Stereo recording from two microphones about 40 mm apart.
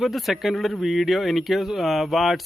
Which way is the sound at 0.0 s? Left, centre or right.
Centre.